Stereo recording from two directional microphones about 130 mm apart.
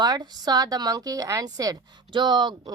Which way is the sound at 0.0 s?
30° right (ahead or behind).